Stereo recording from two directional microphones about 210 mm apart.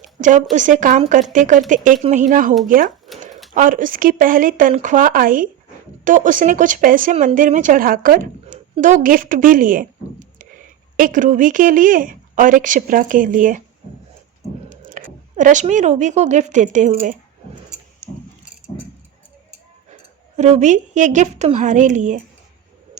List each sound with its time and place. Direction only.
0.0 s a sound: 35° right (ahead or behind)
0.5 s a woman's voice: 35° right (ahead or behind)
14.7 s speech: 40° right (ahead or behind)
20.3 s a woman's voice: 35° right (ahead or behind)